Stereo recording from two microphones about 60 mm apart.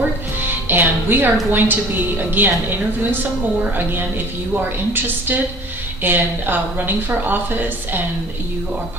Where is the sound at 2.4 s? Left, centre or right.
Right.